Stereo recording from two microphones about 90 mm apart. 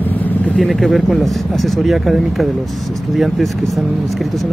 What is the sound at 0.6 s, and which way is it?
Speech, centre (ahead or behind).